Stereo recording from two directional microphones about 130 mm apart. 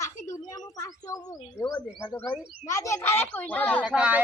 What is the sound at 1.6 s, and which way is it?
Speech, 10° left (ahead or behind).